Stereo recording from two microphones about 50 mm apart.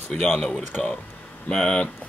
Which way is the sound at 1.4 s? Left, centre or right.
Centre.